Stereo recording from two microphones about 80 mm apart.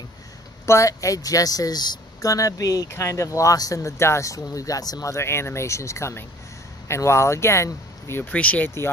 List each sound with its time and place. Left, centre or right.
0.7 s speech: left
2.2 s speech: left
2.9 s speech: left
5.1 s speech: left
8.2 s speech: centre